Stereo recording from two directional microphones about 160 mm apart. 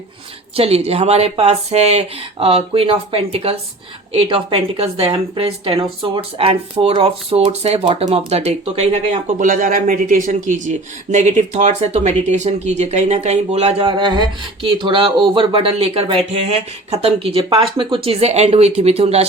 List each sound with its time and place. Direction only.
0.5 s speech: 40° right (ahead or behind)